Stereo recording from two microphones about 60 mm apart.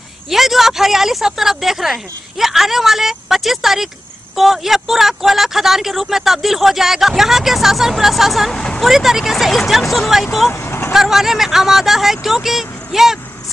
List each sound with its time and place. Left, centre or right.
0.3 s speech: centre
8.5 s speech: centre
8.8 s speech: centre
10.5 s vehicle: left
10.9 s speech: centre